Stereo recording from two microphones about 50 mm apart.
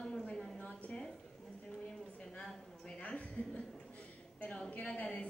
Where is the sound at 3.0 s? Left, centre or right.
Left.